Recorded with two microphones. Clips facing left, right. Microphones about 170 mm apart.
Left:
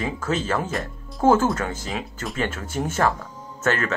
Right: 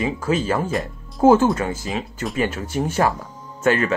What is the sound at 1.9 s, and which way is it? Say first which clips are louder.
Speech: right 4 dB; centre (ahead or behind).